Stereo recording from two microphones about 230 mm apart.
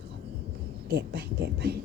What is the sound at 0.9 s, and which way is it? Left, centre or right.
Speech, right.